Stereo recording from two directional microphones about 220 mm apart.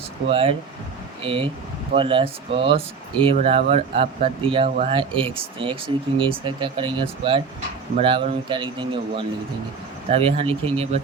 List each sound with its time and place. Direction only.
0.3 s speech: 25° right (ahead or behind)